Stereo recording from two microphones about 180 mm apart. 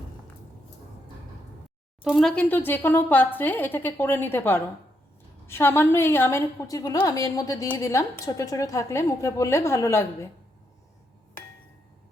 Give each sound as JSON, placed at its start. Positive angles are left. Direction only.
{"t": 2.0, "sound": "a woman's voice", "side_deg": 0}